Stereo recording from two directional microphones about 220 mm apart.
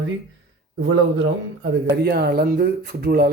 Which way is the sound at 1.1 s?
45° right (ahead or behind).